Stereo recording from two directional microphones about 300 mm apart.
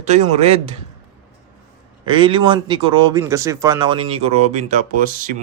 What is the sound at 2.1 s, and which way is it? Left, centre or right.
Speech, centre.